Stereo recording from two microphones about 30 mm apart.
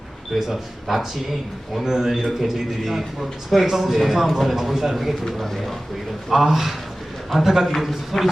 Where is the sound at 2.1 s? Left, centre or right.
Centre.